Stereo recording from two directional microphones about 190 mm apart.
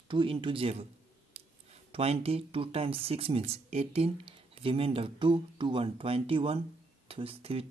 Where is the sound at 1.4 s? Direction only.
30° right (ahead or behind).